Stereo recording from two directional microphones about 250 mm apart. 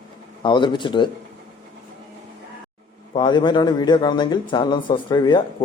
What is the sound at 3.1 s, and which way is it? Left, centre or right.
Speech, centre.